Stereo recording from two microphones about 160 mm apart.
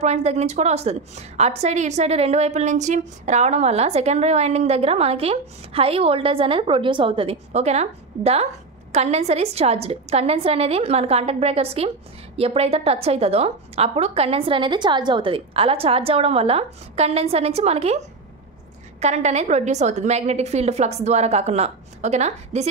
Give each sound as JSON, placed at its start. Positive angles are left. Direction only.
{"t": 0.0, "sound": "a woman's voice", "side_deg": -45}